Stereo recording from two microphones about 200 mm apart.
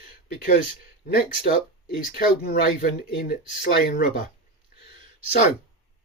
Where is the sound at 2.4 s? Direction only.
50° left (ahead or behind).